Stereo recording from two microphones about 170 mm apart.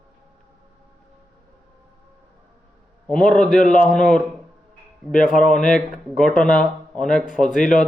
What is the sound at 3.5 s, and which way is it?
Speech, 50° left (ahead or behind).